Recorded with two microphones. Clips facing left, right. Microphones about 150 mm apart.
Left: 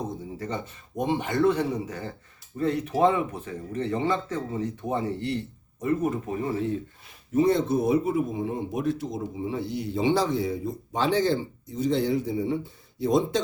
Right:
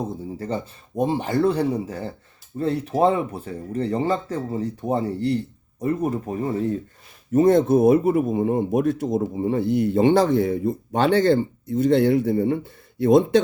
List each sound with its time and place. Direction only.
0.0 s speech: 35° right (ahead or behind)
7.3 s speech: 50° right (ahead or behind)